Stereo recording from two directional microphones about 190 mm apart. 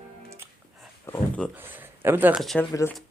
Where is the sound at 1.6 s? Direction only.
10° right (ahead or behind).